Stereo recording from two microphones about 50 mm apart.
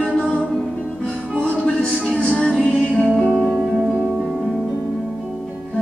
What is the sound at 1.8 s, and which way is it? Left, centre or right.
Music, centre.